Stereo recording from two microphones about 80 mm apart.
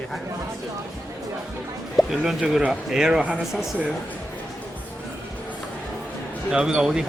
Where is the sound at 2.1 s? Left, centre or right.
Centre.